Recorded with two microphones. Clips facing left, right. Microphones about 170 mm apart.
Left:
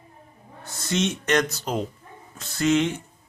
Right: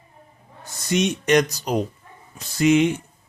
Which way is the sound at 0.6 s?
15° right (ahead or behind).